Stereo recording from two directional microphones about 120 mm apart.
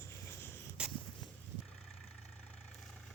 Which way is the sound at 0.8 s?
10° right (ahead or behind).